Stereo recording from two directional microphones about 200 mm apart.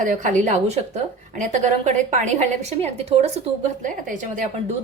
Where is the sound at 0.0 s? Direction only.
40° right (ahead or behind).